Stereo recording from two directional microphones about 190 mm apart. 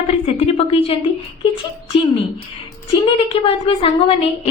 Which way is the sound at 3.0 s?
25° left (ahead or behind).